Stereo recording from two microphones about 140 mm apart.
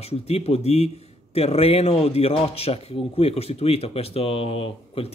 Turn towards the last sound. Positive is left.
turn(degrees=45)  # may be behind; listen again after turning